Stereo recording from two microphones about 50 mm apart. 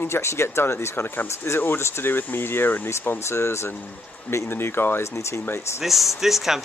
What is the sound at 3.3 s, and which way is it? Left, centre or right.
Speech, left.